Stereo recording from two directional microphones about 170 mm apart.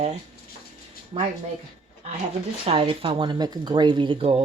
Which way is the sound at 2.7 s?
30° right (ahead or behind).